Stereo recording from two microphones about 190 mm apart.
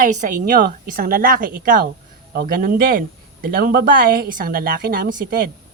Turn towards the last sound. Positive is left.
turn(degrees=-50)  # may be behind; listen again after turning